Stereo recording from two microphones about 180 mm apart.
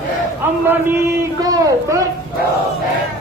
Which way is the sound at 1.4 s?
20° right (ahead or behind).